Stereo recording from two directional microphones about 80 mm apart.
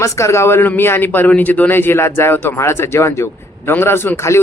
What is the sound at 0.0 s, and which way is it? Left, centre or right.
Speech, left.